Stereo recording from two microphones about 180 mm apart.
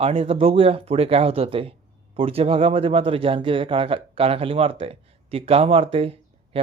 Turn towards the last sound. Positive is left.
turn(degrees=-30)  # may be behind; listen again after turning